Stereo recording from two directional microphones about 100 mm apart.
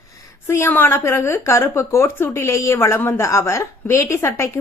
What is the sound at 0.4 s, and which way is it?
A woman's voice, 25° left (ahead or behind).